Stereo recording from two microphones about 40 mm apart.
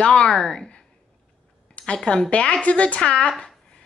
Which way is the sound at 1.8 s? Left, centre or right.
Left.